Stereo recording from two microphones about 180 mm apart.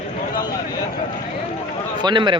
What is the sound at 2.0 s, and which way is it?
Speech, 25° right (ahead or behind).